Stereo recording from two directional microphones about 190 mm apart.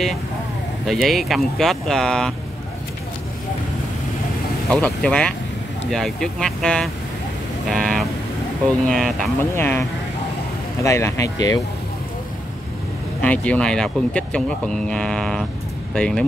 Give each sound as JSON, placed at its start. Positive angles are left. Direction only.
{"t": 0.8, "sound": "speech", "side_deg": 0}
{"t": 4.6, "sound": "speech", "side_deg": 5}
{"t": 13.2, "sound": "speech", "side_deg": 5}